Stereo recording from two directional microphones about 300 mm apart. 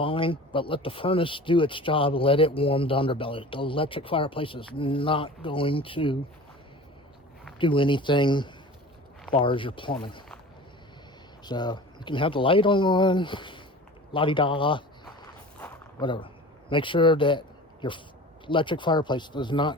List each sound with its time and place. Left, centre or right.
0.0 s speech: centre
7.6 s speech: centre
11.4 s speech: centre
15.2 s a sound: centre
18.4 s speech: centre